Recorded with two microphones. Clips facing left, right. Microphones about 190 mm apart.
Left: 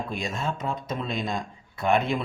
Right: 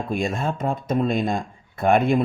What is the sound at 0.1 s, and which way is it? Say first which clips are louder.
Speech: right 6 dB; 50° right (ahead or behind).